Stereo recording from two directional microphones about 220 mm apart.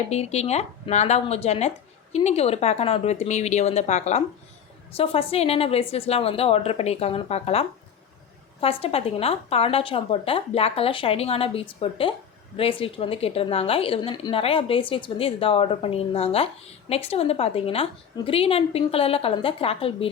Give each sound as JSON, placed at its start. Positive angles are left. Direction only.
{"t": 0.1, "sound": "a woman's voice", "side_deg": 30}